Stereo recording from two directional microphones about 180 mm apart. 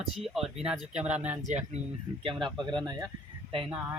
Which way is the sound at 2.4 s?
25° right (ahead or behind).